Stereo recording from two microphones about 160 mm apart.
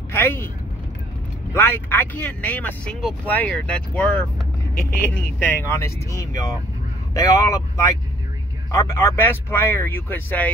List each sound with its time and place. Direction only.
0.1 s vehicle: 15° left (ahead or behind)
1.5 s speech: 15° left (ahead or behind)
5.4 s speech: 15° left (ahead or behind)